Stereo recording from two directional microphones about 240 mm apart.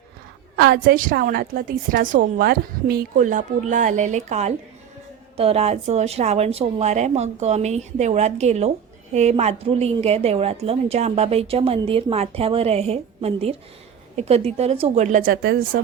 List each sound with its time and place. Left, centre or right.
0.5 s a woman's voice: right